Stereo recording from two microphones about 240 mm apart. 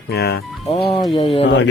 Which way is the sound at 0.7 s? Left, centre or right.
Left.